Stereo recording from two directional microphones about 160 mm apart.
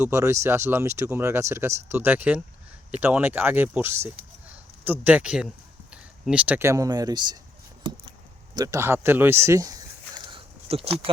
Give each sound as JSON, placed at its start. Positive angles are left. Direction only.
{"t": 0.0, "sound": "speech", "side_deg": -15}
{"t": 8.5, "sound": "speech", "side_deg": -20}
{"t": 10.2, "sound": "a sound", "side_deg": -35}